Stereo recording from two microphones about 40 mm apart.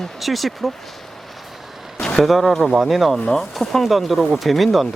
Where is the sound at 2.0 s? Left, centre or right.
Centre.